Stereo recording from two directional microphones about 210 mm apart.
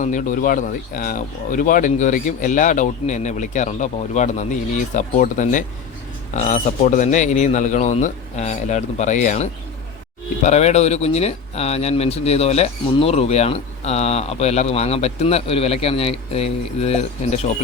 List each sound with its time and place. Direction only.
0.0 s speech: 35° left (ahead or behind)